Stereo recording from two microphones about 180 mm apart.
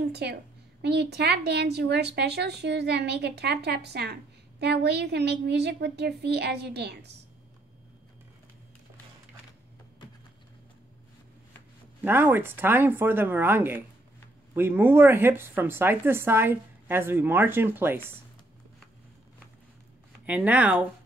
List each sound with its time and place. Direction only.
0.1 s a woman's voice: 65° right (ahead or behind)
12.0 s speech: 10° right (ahead or behind)
20.1 s speech: 10° right (ahead or behind)